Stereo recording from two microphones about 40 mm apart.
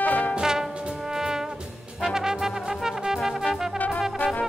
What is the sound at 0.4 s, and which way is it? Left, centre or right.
Music, centre.